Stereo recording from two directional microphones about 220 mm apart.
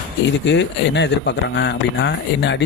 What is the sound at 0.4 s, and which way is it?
Speech, 55° left (ahead or behind).